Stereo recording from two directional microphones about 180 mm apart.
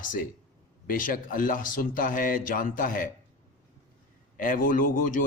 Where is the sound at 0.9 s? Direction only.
50° left (ahead or behind).